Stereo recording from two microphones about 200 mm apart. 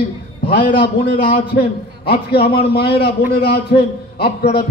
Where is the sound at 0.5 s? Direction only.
55° left (ahead or behind).